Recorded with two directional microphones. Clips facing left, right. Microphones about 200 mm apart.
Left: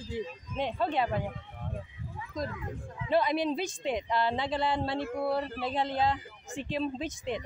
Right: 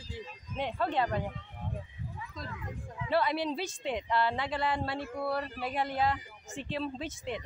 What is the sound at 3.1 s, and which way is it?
Speech, 20° left (ahead or behind).